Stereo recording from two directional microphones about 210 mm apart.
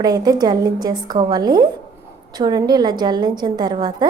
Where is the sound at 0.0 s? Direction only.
20° right (ahead or behind).